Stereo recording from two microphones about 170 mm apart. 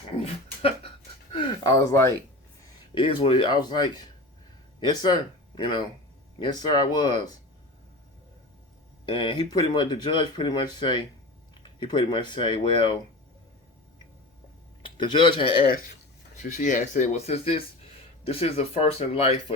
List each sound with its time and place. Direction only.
0.2 s a sound: 35° left (ahead or behind)
1.4 s a sound: 20° left (ahead or behind)
2.9 s speech: 30° left (ahead or behind)
9.0 s speech: 25° left (ahead or behind)
14.8 s speech: 30° left (ahead or behind)
15.6 s speech: 55° left (ahead or behind); by 19.5 s 35° left (ahead or behind)